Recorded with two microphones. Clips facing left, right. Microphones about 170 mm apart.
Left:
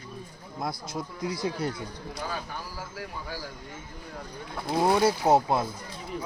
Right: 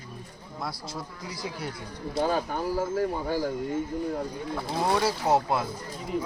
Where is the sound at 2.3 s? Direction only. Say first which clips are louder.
Right 9 dB; 50° right (ahead or behind).